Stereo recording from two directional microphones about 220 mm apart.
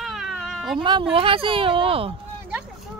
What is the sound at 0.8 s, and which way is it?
Speech, 20° right (ahead or behind).